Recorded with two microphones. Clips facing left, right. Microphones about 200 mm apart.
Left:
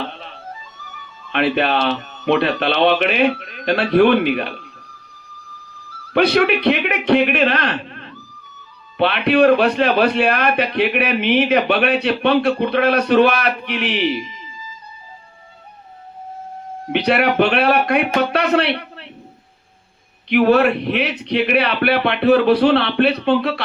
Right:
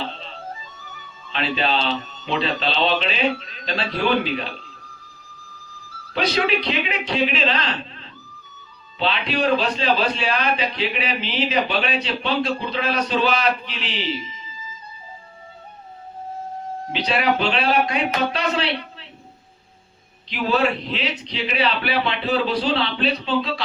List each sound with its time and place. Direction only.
0.0 s music: 60° left (ahead or behind)
1.3 s a man's voice: 60° left (ahead or behind)
6.1 s a man's voice: 60° left (ahead or behind)
16.9 s a man's voice: 60° left (ahead or behind)
20.3 s a man's voice: 60° left (ahead or behind)